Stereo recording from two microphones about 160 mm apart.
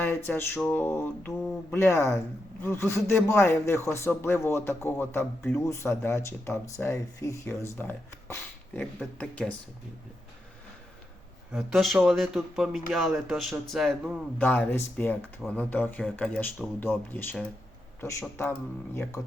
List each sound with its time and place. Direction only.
0.3 s speech: 15° left (ahead or behind)
9.1 s speech: 5° left (ahead or behind)
11.5 s speech: centre (ahead or behind); by 18.5 s 15° left (ahead or behind)